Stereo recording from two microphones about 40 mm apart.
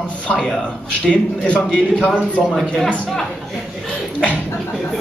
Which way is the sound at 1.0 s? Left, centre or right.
Left.